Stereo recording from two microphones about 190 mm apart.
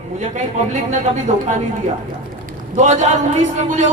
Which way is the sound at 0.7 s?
40° right (ahead or behind).